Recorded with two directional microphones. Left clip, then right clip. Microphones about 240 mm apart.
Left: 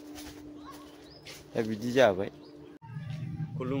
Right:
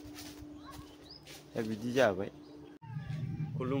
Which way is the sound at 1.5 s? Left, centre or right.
Centre.